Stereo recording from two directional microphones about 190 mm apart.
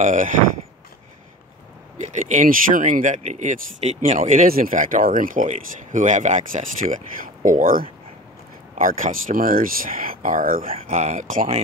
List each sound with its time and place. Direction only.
0.0 s speech: 40° right (ahead or behind)
2.0 s speech: 40° right (ahead or behind)